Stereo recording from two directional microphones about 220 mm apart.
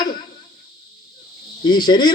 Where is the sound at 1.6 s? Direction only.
20° left (ahead or behind).